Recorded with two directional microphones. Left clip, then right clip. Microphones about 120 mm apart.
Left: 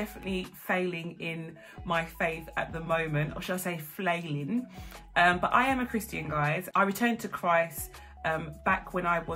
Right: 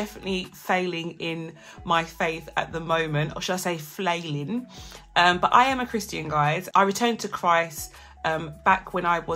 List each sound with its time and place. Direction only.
0.0 s speech: 25° right (ahead or behind)